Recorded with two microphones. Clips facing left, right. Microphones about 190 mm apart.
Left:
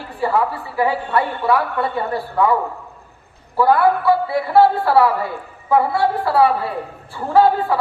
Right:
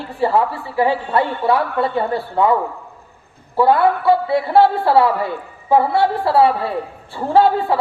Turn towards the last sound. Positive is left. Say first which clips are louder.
# even
turn(degrees=-25)  # may be behind; listen again after turning